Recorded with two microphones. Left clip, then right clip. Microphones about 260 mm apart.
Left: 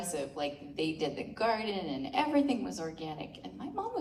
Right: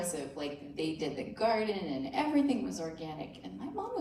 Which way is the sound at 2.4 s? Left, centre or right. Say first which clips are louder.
Even; centre.